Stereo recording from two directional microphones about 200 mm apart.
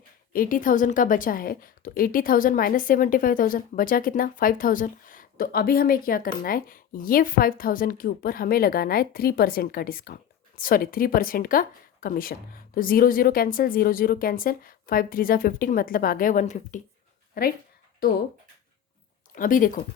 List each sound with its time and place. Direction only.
0.3 s a woman's voice: 45° left (ahead or behind)
19.3 s a woman's voice: 40° left (ahead or behind)